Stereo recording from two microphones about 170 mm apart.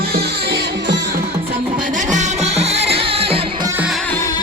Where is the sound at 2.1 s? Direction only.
40° right (ahead or behind).